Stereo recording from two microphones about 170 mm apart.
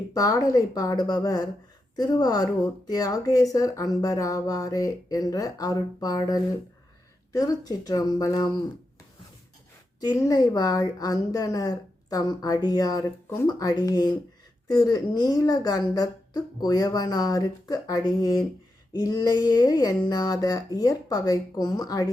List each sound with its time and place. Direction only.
0.1 s a woman's voice: 20° left (ahead or behind)
10.0 s a woman's voice: 20° left (ahead or behind)